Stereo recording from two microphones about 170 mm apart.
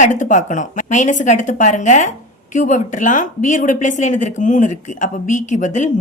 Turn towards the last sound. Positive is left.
turn(degrees=45)  # may be behind; listen again after turning